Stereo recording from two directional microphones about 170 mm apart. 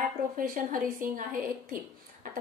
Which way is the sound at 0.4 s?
55° right (ahead or behind).